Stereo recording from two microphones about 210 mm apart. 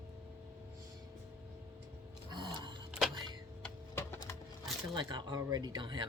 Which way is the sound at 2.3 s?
20° right (ahead or behind).